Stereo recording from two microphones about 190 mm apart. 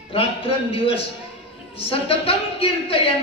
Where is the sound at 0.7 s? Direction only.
30° left (ahead or behind).